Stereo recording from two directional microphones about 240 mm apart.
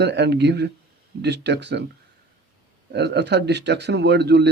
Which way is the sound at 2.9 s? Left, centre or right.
Right.